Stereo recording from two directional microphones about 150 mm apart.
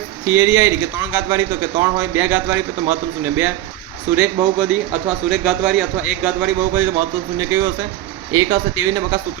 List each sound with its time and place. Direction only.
0.3 s a man's voice: 15° right (ahead or behind)